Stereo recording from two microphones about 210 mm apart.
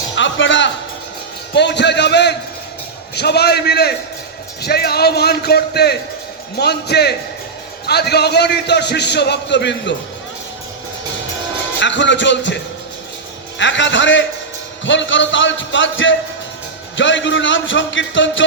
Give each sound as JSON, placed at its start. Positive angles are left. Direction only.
{"t": 0.2, "sound": "a man's voice", "side_deg": 60}
{"t": 11.8, "sound": "speech", "side_deg": 60}
{"t": 13.6, "sound": "speech", "side_deg": 60}